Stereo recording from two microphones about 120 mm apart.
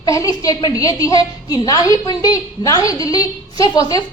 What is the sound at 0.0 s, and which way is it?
A woman's voice, 30° left (ahead or behind).